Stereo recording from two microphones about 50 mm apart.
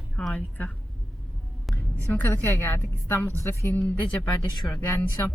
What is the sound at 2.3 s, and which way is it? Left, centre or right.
Speech, left.